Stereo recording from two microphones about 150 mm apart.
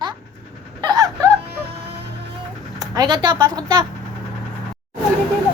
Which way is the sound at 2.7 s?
25° right (ahead or behind).